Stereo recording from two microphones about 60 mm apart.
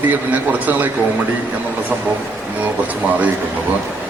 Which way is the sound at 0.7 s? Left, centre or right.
Right.